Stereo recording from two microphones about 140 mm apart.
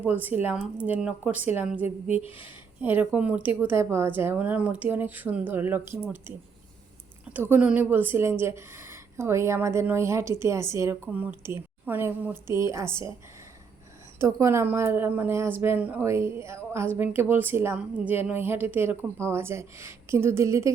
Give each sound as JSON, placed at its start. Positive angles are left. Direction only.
{"t": 0.0, "sound": "a woman's voice", "side_deg": -15}
{"t": 2.0, "sound": "speech", "side_deg": 45}
{"t": 2.8, "sound": "a woman's voice", "side_deg": -15}
{"t": 7.3, "sound": "a woman's voice", "side_deg": -15}
{"t": 14.2, "sound": "a woman's voice", "side_deg": -20}